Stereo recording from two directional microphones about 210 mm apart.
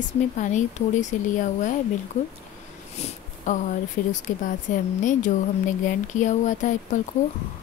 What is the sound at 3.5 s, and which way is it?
Speech, 35° left (ahead or behind).